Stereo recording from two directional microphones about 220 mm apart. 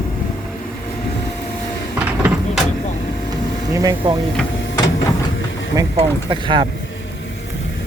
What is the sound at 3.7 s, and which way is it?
Speech, 15° right (ahead or behind).